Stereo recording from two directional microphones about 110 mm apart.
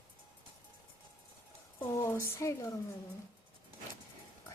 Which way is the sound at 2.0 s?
25° left (ahead or behind).